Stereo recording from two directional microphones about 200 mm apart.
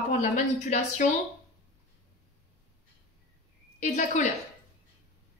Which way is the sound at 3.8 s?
35° left (ahead or behind).